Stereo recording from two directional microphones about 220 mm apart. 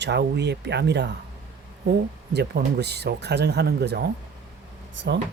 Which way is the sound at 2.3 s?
50° right (ahead or behind).